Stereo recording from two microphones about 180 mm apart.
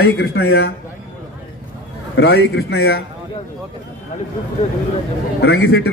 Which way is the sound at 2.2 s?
65° left (ahead or behind).